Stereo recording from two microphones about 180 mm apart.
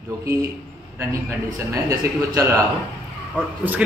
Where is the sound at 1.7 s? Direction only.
15° right (ahead or behind).